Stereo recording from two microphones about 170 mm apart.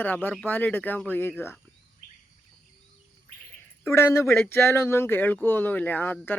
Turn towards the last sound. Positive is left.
turn(degrees=10)  # may be behind; listen again after turning